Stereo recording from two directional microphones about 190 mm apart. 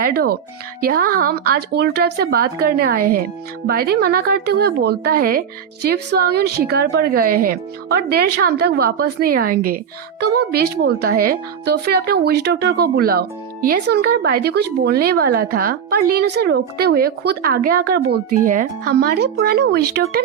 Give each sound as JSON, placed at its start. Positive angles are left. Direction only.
{"t": 0.0, "sound": "a woman's voice", "side_deg": -55}